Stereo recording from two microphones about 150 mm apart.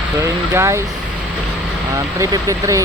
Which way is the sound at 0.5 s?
15° right (ahead or behind).